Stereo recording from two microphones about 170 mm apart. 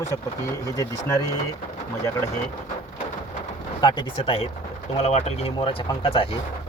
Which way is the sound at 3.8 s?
30° left (ahead or behind).